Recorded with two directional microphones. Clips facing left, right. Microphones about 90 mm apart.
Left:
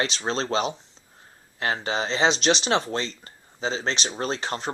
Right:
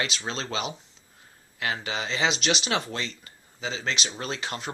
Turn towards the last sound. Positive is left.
turn(degrees=35)  # may be behind; listen again after turning